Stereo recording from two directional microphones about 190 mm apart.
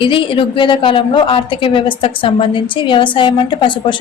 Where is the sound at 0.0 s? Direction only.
25° left (ahead or behind).